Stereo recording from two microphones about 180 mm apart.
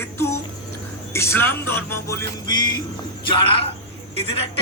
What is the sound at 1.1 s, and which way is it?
Music, 15° left (ahead or behind).